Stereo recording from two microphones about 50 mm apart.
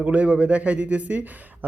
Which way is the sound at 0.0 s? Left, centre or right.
Right.